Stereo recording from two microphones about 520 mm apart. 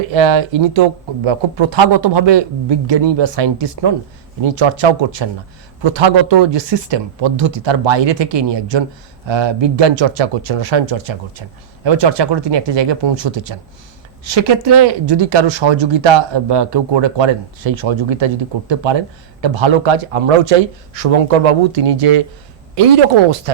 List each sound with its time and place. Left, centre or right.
0.1 s speech: right